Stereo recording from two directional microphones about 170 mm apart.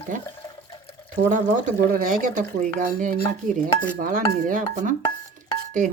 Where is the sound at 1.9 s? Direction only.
50° right (ahead or behind).